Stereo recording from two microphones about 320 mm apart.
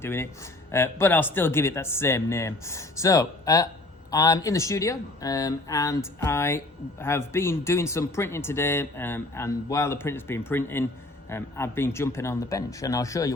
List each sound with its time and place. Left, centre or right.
0.0 s speech: centre